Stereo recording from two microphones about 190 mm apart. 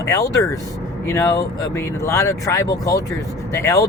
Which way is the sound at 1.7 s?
15° left (ahead or behind).